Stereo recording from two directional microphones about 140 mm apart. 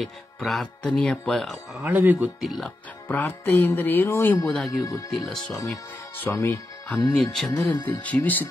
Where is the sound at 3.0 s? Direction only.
15° left (ahead or behind).